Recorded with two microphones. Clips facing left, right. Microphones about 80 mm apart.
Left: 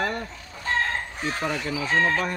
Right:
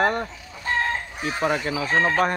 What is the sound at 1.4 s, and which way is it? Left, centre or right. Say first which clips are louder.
Speech: right 6 dB; right.